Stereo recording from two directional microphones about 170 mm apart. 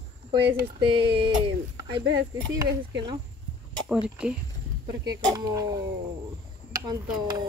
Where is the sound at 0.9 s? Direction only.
30° right (ahead or behind).